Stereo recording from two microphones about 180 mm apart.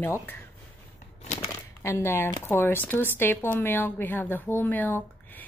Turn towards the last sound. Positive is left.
turn(degrees=10)  # may be behind; listen again after turning